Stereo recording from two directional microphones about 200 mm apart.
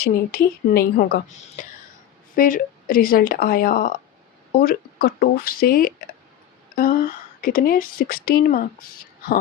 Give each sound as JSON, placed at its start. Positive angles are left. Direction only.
{"t": 0.0, "sound": "a woman's voice", "side_deg": 45}
{"t": 1.6, "sound": "throat clearing", "side_deg": 40}
{"t": 2.3, "sound": "a woman's voice", "side_deg": 45}